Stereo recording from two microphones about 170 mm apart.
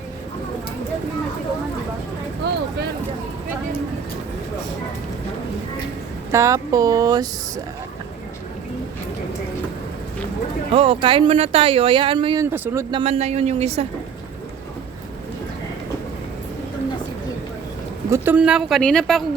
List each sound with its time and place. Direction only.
2.5 s a sound: 90° right
6.3 s speech: 20° right (ahead or behind)
10.7 s speech: 35° right (ahead or behind)
12.5 s speech: 15° right (ahead or behind)
12.9 s speech: 35° right (ahead or behind)
18.1 s speech: 10° right (ahead or behind)
18.8 s speech: 5° left (ahead or behind)